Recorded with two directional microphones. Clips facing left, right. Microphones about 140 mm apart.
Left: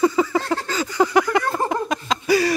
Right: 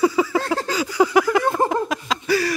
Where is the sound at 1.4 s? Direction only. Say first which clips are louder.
Right 3 dB; 15° right (ahead or behind).